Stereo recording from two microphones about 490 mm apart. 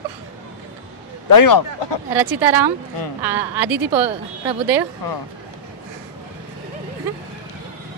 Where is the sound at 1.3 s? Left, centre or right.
Left.